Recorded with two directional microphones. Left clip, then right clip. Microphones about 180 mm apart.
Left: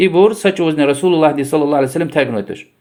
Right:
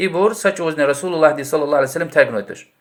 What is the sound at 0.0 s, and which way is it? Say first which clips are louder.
Speech: left 5 dB; 25° left (ahead or behind).